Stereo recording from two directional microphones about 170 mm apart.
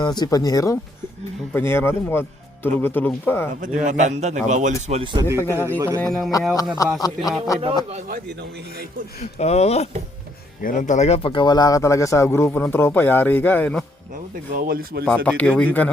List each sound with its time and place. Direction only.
0.0 s speech: 25° left (ahead or behind)
3.5 s a man's voice: 50° right (ahead or behind)
5.4 s speech: 15° left (ahead or behind)
6.0 s speech: centre (ahead or behind)
6.8 s speech: 20° left (ahead or behind)
8.0 s a man's voice: 65° right (ahead or behind)
9.4 s speech: 40° left (ahead or behind)
10.6 s speech: 50° left (ahead or behind); by 13.8 s 10° left (ahead or behind)
14.5 s a man's voice: 60° right (ahead or behind)
15.0 s speech: 10° left (ahead or behind)